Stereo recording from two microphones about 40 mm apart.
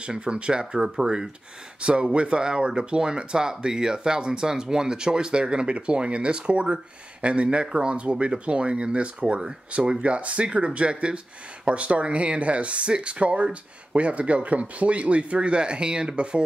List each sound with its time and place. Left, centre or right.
0.0 s speech: right